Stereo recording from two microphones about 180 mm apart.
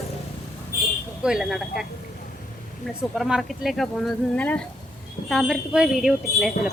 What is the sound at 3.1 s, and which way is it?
Speech, centre (ahead or behind).